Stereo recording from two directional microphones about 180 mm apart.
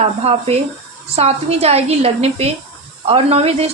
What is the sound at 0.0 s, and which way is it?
A woman's voice, 35° right (ahead or behind).